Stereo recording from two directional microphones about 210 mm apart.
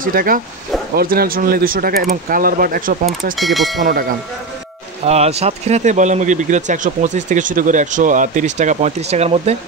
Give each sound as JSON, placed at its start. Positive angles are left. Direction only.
{"t": 0.0, "sound": "speech", "side_deg": -40}
{"t": 3.3, "sound": "speech", "side_deg": 0}
{"t": 5.0, "sound": "speech", "side_deg": -30}